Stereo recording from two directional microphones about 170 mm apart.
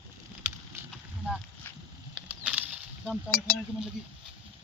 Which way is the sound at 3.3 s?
60° left (ahead or behind).